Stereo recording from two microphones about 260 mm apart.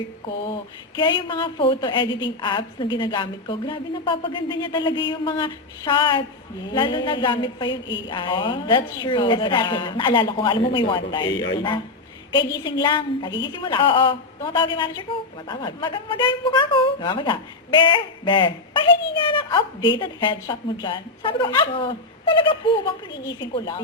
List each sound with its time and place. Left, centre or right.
0.9 s a woman's voice: centre